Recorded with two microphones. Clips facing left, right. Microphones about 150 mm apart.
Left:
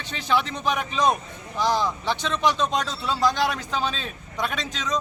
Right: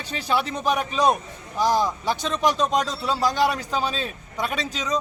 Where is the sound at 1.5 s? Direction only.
10° right (ahead or behind).